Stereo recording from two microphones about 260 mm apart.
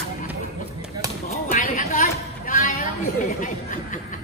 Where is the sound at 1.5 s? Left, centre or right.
Left.